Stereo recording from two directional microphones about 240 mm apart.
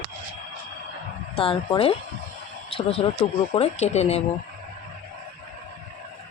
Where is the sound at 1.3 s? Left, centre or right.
Left.